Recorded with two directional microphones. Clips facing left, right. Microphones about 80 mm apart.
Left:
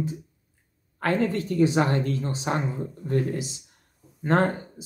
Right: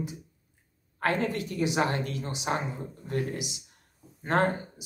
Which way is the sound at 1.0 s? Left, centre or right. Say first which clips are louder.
Left 4 dB; left.